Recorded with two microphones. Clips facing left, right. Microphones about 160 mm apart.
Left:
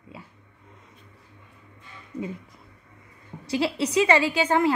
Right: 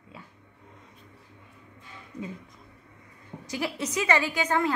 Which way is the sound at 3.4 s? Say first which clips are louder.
Left 6 dB; 30° left (ahead or behind).